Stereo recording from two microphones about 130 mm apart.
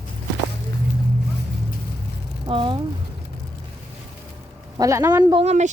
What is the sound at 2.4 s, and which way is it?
Speech, 40° right (ahead or behind).